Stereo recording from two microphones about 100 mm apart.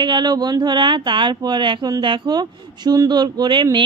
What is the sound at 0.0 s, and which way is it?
A woman's voice, 45° right (ahead or behind).